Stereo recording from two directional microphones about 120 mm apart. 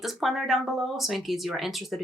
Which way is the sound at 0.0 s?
Centre (ahead or behind).